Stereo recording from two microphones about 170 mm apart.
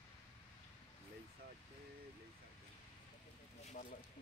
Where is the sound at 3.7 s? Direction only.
50° left (ahead or behind).